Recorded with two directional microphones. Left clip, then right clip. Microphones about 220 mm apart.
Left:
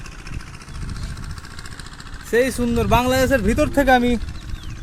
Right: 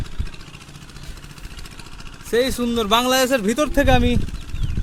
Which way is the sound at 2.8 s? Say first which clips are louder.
Even; 15° right (ahead or behind).